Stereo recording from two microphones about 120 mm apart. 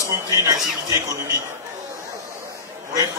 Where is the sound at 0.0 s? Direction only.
25° right (ahead or behind).